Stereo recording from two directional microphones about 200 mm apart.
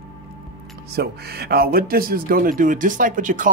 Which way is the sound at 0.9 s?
50° right (ahead or behind).